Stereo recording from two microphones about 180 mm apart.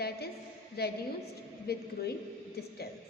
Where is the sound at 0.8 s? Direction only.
60° left (ahead or behind).